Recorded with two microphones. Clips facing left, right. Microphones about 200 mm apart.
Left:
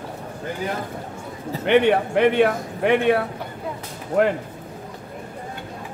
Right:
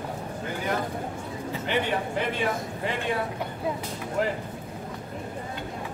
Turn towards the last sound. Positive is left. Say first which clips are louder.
# left 8 dB
turn(degrees=65)  # may be behind; listen again after turning